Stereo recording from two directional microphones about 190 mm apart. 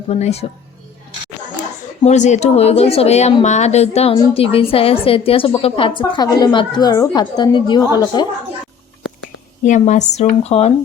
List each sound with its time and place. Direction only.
0.1 s a woman's voice: 35° left (ahead or behind)
2.0 s a woman's voice: 40° left (ahead or behind); by 8.3 s 20° left (ahead or behind)
9.6 s a woman's voice: 40° left (ahead or behind)